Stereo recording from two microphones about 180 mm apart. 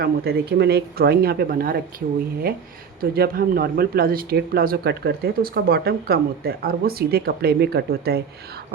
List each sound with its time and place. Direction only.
0.0 s speech: 60° right (ahead or behind)
3.0 s speech: 55° right (ahead or behind)